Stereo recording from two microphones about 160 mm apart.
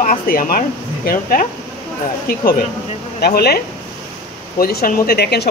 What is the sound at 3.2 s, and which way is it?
Speech, 80° left.